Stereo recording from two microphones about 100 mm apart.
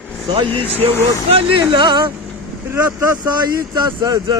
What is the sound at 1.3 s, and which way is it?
Speech, 65° right (ahead or behind).